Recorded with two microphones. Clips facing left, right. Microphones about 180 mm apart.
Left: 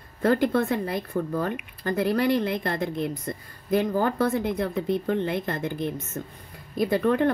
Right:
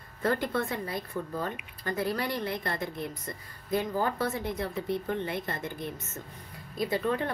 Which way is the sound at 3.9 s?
40° left (ahead or behind).